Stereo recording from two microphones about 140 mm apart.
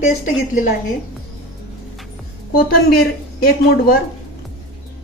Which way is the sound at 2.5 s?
90° left.